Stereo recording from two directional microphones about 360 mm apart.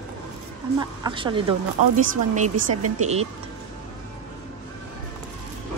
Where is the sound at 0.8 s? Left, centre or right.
Centre.